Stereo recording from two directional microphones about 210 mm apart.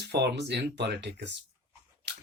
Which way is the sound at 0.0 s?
55° right (ahead or behind).